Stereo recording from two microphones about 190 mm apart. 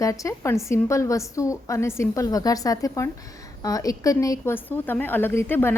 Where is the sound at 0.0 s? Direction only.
15° left (ahead or behind).